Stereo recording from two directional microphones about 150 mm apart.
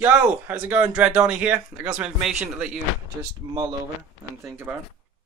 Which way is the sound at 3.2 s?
25° right (ahead or behind).